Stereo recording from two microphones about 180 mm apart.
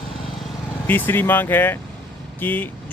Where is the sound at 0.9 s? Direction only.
10° left (ahead or behind).